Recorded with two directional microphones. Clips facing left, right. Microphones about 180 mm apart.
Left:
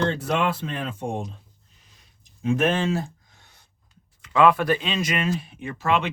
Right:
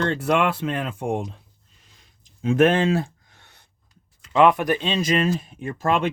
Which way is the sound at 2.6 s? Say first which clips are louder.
Right 4 dB; 60° right (ahead or behind).